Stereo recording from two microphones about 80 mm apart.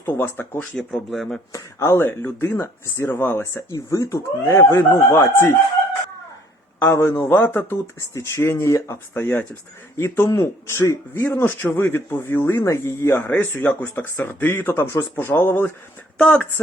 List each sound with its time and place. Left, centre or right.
0.0 s speech: left
0.3 s speech: left
0.8 s speech: centre
1.5 s speech: left
3.8 s speech: left
6.7 s speech: left
10.0 s speech: left
13.2 s speech: left
16.1 s speech: centre